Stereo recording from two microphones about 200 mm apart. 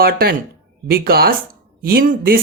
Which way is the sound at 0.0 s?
50° right (ahead or behind).